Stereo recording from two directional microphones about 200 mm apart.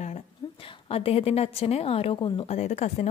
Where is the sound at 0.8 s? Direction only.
30° left (ahead or behind).